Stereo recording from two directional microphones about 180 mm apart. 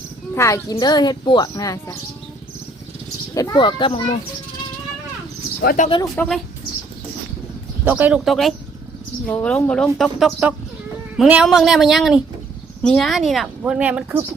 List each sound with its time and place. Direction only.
0.3 s speech: 15° left (ahead or behind)
3.3 s speech: 20° left (ahead or behind)
5.6 s speech: 45° left (ahead or behind)
6.1 s a woman's voice: 5° left (ahead or behind)
7.9 s a woman's voice: 10° right (ahead or behind)